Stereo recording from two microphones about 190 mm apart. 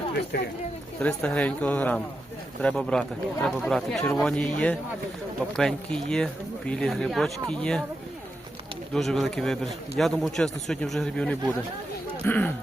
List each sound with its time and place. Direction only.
0.3 s speech: 60° left (ahead or behind)
0.9 s speech: 5° left (ahead or behind)
8.9 s speech: centre (ahead or behind)